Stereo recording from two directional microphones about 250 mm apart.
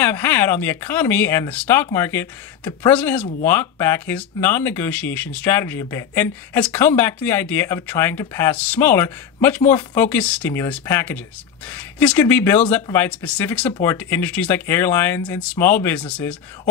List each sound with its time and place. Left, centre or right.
0.0 s speech: centre